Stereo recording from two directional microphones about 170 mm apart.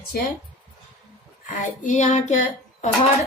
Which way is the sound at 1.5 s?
45° left (ahead or behind).